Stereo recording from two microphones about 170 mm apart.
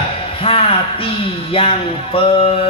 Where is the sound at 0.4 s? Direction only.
35° left (ahead or behind).